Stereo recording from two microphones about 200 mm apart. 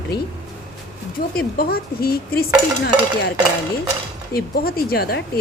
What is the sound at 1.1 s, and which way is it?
Speech, 50° left (ahead or behind).